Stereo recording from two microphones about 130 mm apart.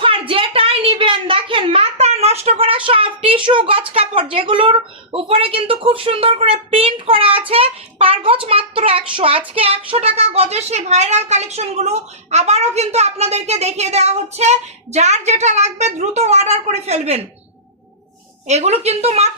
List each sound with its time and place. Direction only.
0.0 s a woman's voice: 45° right (ahead or behind)
9.1 s child singing: 45° right (ahead or behind)
9.6 s speech: 50° right (ahead or behind)
18.4 s speech: 55° right (ahead or behind)